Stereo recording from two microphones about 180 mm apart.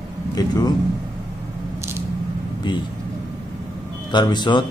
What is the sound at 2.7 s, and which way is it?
Speech, 25° left (ahead or behind).